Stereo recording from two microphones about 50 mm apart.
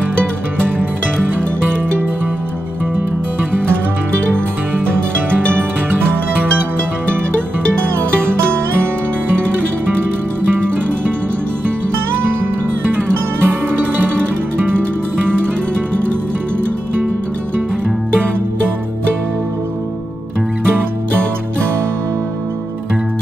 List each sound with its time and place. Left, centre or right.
5.5 s music: right
13.4 s music: right
15.2 s music: left